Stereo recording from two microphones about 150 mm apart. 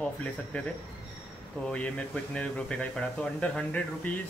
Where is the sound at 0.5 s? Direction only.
10° left (ahead or behind).